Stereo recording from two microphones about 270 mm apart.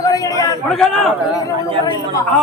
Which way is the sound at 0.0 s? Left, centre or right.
Centre.